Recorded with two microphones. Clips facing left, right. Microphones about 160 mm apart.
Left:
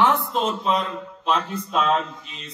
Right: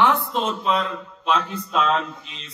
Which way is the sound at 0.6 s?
40° left (ahead or behind).